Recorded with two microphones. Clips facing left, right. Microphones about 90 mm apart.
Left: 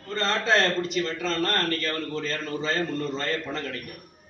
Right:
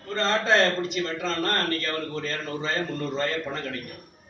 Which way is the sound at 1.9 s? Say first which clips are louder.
Even; 10° right (ahead or behind).